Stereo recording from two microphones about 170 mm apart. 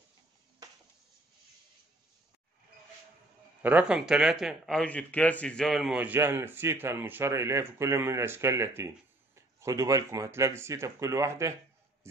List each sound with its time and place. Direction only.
3.6 s speech: 10° right (ahead or behind)